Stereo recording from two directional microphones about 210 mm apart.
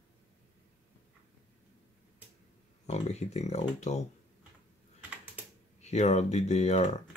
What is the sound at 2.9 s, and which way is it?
Speech, 30° left (ahead or behind).